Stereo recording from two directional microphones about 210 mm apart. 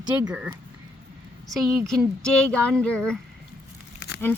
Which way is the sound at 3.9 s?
55° left (ahead or behind).